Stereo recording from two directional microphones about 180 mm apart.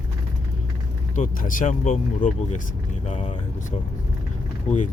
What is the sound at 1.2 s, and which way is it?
Speech, 45° left (ahead or behind).